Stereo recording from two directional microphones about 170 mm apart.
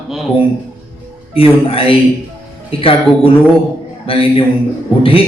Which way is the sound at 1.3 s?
35° left (ahead or behind).